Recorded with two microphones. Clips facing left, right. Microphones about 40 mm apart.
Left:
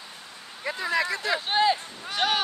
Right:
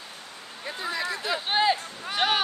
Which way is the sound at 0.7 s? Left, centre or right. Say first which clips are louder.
Left 5 dB; left.